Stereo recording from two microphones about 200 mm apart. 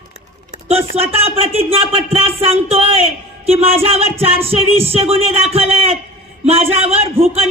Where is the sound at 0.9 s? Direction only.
30° right (ahead or behind).